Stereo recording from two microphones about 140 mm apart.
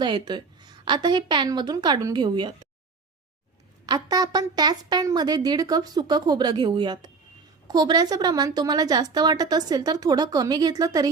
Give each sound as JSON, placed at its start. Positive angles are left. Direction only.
{"t": 0.0, "sound": "a woman's voice", "side_deg": -30}
{"t": 3.8, "sound": "a woman's voice", "side_deg": -30}